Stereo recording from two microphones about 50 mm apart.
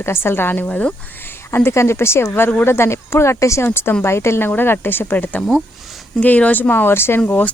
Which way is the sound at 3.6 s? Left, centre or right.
Left.